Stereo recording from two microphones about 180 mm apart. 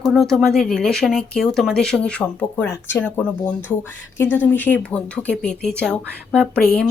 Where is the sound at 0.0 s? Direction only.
Centre (ahead or behind).